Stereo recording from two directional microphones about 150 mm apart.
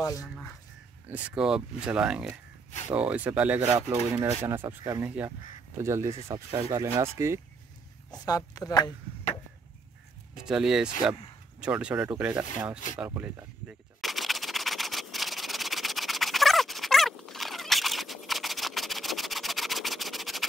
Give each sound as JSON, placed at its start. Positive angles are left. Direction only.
{"t": 0.0, "sound": "a sound", "side_deg": 20}
{"t": 1.1, "sound": "speech", "side_deg": -5}
{"t": 8.1, "sound": "speech", "side_deg": 25}
{"t": 10.3, "sound": "speech", "side_deg": -5}
{"t": 12.9, "sound": "gunshot", "side_deg": -10}